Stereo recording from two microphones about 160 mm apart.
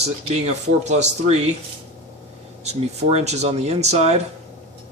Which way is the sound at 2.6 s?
40° right (ahead or behind).